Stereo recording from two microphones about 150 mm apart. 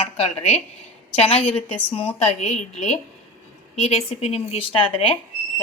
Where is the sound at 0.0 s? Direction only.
40° left (ahead or behind).